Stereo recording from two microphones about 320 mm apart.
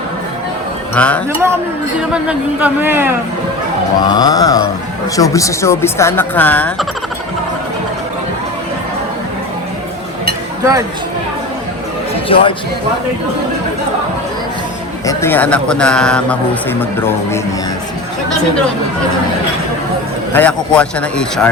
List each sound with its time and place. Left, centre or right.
0.9 s speech: centre
4.0 s speech: centre
10.6 s speech: centre
12.3 s speech: centre
15.0 s speech: centre
20.3 s speech: centre